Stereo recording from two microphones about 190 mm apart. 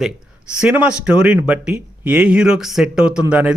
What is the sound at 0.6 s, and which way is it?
Speech, 5° right (ahead or behind).